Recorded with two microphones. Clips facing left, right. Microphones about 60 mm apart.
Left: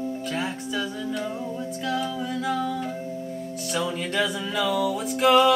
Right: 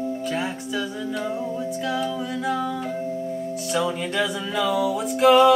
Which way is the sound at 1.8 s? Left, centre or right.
Centre.